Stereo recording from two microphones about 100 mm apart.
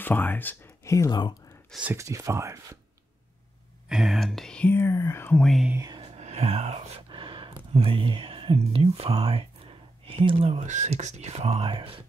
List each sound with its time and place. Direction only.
0.0 s speech: 20° left (ahead or behind)
0.8 s speech: 30° left (ahead or behind)
2.0 s speech: 30° right (ahead or behind)
3.9 s speech: 5° right (ahead or behind)
4.7 s speech: 30° left (ahead or behind)
5.4 s speech: centre (ahead or behind)
6.1 s speech: 90° right
7.1 s a sound: 60° right (ahead or behind)
7.7 s speech: 65° right (ahead or behind)